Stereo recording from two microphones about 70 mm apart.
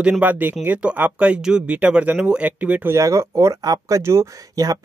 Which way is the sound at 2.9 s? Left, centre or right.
Right.